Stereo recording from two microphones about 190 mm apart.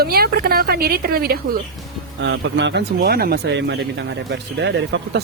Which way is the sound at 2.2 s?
70° right (ahead or behind).